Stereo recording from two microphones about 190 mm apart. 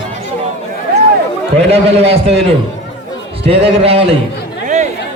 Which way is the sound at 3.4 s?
30° right (ahead or behind).